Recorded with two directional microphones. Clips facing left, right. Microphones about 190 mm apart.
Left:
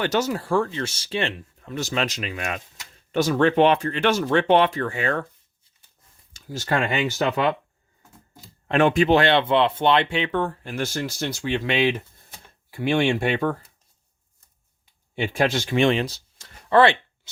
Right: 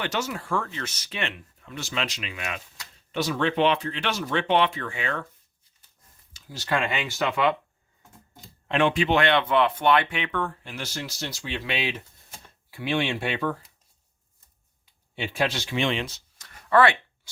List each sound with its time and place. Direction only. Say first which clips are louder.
0.0 s speech: left 6 dB; 40° left (ahead or behind)
6.3 s speech: left 3 dB; 45° left (ahead or behind)
8.6 s speech: left 4 dB; 45° left (ahead or behind)
10.7 s speech: left 8 dB; 50° left (ahead or behind)
15.1 s speech: left 5 dB; 50° left (ahead or behind); by 17.0 s 25° left (ahead or behind)